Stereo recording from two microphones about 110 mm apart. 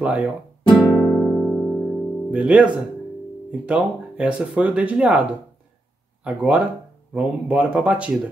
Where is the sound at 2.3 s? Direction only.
10° right (ahead or behind).